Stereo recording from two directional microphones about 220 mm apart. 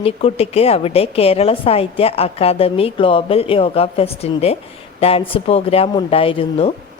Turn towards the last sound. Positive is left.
turn(degrees=25)  # may be behind; listen again after turning